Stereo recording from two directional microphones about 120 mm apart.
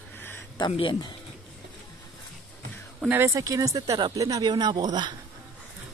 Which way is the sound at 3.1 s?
20° right (ahead or behind).